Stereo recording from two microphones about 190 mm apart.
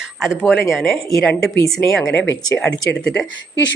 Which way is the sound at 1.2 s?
10° left (ahead or behind).